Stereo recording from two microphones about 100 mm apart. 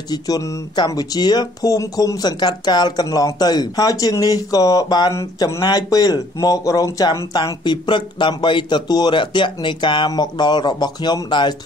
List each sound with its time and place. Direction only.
0.1 s speech: 35° left (ahead or behind)
7.6 s speech: 50° left (ahead or behind)